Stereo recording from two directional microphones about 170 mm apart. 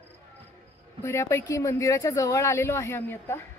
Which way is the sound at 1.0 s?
15° left (ahead or behind).